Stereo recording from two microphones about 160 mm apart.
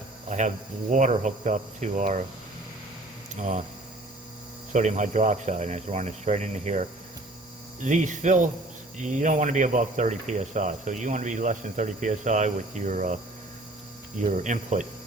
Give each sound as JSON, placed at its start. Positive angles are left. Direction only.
{"t": 0.3, "sound": "speech", "side_deg": -50}
{"t": 3.3, "sound": "speech", "side_deg": -50}
{"t": 4.7, "sound": "speech", "side_deg": -50}
{"t": 14.2, "sound": "speech", "side_deg": -50}